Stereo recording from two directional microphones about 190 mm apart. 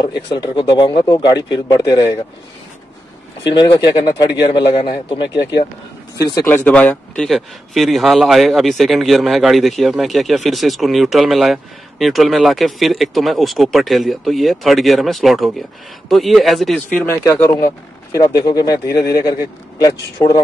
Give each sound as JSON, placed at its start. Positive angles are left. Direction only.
{"t": 0.0, "sound": "speech", "side_deg": 20}
{"t": 3.5, "sound": "speech", "side_deg": 20}
{"t": 6.4, "sound": "speech", "side_deg": 10}
{"t": 20.2, "sound": "speech", "side_deg": 20}